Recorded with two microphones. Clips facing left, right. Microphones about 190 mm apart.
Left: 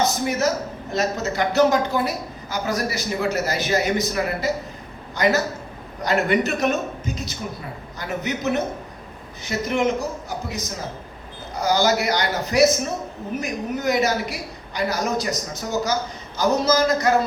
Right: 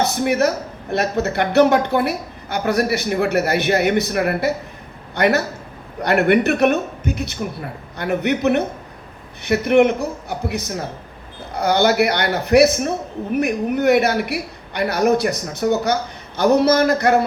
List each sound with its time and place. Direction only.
0.0 s speech: 60° right (ahead or behind)